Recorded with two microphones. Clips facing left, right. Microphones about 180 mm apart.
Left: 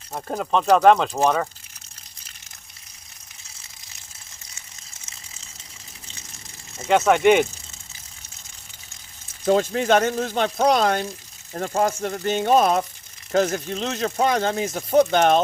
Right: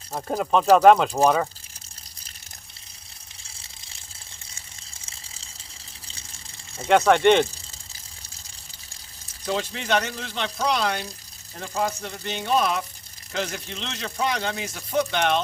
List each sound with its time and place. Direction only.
0.1 s speech: 5° right (ahead or behind)
4.5 s a sound: 30° right (ahead or behind)
6.8 s speech: 5° left (ahead or behind)
9.5 s speech: 45° left (ahead or behind)